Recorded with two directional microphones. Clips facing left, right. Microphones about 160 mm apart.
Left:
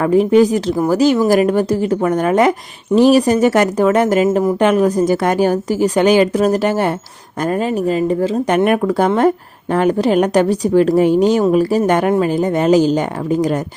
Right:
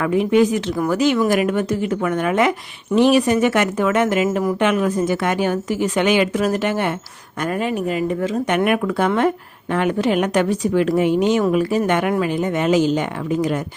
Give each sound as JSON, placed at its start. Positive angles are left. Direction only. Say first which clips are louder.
{"t": 0.0, "sound": "speech", "louder": "left 5 dB", "side_deg": 35}